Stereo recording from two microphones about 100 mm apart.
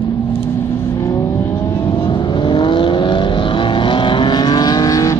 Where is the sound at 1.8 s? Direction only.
50° left (ahead or behind).